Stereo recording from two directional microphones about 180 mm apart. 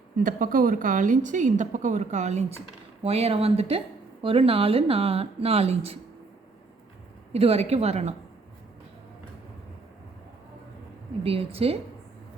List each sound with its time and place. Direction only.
0.2 s a woman's voice: 50° right (ahead or behind); by 6.0 s 35° right (ahead or behind)
7.3 s a woman's voice: 35° right (ahead or behind)
11.2 s a woman's voice: 30° right (ahead or behind)